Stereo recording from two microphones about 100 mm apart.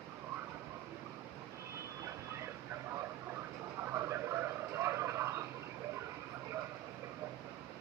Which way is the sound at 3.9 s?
25° right (ahead or behind).